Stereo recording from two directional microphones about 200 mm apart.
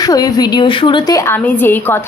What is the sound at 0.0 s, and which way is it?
A woman's voice, 20° left (ahead or behind).